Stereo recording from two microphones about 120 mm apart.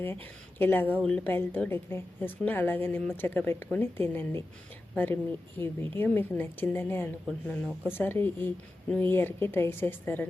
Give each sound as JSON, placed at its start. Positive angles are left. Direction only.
{"t": 0.0, "sound": "a woman's voice", "side_deg": 15}
{"t": 5.5, "sound": "a woman's voice", "side_deg": 15}